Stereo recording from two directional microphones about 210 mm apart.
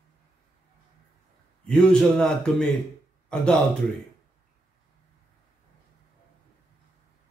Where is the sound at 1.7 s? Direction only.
5° left (ahead or behind).